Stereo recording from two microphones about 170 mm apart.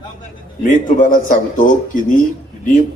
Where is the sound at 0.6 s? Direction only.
50° left (ahead or behind).